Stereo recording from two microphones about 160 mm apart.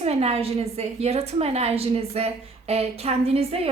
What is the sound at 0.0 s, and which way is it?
A woman's voice, 40° right (ahead or behind).